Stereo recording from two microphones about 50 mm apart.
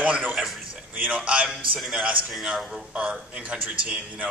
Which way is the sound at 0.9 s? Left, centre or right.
Right.